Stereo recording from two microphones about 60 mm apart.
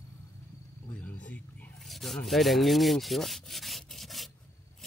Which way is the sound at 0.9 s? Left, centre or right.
Left.